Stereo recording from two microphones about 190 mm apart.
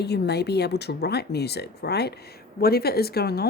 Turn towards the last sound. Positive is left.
turn(degrees=55)  # may be behind; listen again after turning